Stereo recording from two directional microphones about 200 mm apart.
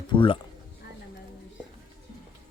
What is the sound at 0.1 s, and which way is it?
Speech, 25° left (ahead or behind).